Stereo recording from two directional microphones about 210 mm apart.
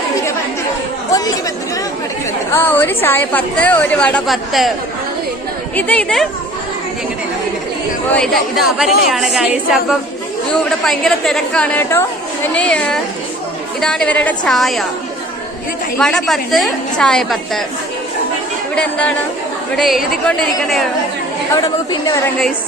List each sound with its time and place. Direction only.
1.1 s chatter: 15° left (ahead or behind)
2.5 s a woman's voice: 10° left (ahead or behind)
5.7 s a woman's voice: 5° left (ahead or behind)
8.1 s a woman's voice: 5° left (ahead or behind)
16.0 s a woman's voice: 5° left (ahead or behind)
18.7 s a woman's voice: 5° left (ahead or behind)
21.5 s a woman's voice: 15° left (ahead or behind)